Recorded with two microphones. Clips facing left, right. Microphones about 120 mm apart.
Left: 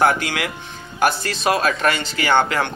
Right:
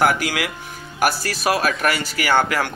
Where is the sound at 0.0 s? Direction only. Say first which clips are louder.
Left 1 dB; 25° left (ahead or behind).